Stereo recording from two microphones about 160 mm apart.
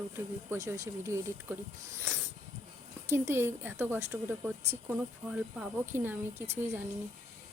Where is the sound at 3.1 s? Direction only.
15° right (ahead or behind).